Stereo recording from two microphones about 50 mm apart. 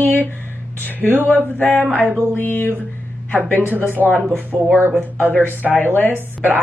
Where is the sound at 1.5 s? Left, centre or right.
Left.